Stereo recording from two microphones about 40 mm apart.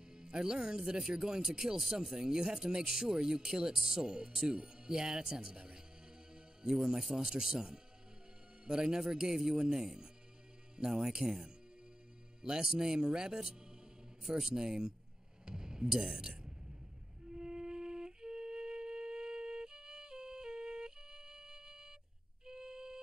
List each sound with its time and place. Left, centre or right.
0.1 s a man's voice: centre
14.2 s speech: centre
14.5 s speech: centre
15.4 s music: centre